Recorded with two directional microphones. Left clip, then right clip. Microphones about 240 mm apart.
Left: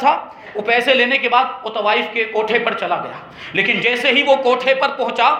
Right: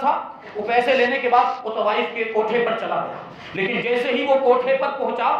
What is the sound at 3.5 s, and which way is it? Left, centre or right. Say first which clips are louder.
Speech: left 5 dB; left.